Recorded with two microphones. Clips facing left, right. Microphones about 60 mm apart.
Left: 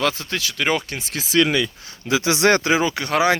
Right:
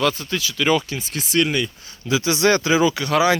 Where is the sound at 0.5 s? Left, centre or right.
Left.